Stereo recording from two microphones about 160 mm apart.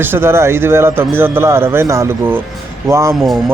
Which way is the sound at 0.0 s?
15° right (ahead or behind).